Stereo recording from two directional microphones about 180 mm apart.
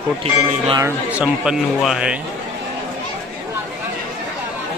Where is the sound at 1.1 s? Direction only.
5° right (ahead or behind).